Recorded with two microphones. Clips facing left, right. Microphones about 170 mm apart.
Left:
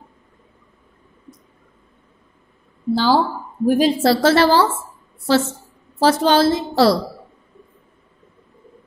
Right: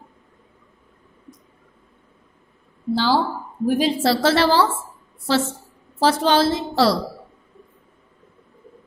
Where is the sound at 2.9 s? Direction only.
45° left (ahead or behind).